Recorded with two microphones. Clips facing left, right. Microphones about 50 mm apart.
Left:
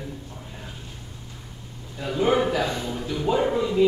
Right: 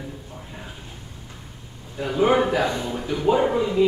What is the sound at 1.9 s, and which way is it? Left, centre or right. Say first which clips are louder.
Speech: right 3 dB; centre.